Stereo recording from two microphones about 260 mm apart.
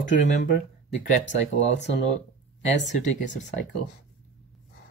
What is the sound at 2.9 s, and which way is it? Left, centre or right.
Speech, left.